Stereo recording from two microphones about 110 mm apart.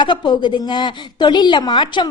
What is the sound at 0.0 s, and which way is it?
A woman's voice, 45° left (ahead or behind).